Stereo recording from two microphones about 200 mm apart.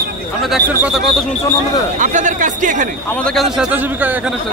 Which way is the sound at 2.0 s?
40° right (ahead or behind).